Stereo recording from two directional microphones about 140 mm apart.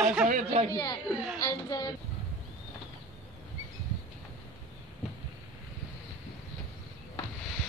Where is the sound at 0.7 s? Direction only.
30° left (ahead or behind).